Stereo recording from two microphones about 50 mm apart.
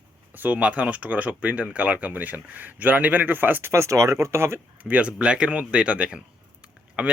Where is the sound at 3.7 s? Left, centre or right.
Right.